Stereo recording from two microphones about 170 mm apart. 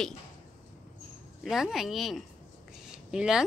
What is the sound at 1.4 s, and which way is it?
Speech, centre (ahead or behind).